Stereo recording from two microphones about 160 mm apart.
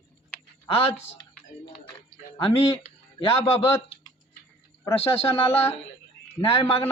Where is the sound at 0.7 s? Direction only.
35° left (ahead or behind).